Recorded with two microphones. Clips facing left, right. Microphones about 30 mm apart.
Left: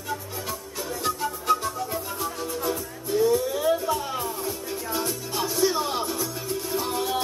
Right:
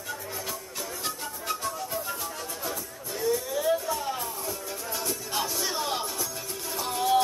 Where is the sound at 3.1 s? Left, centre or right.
Centre.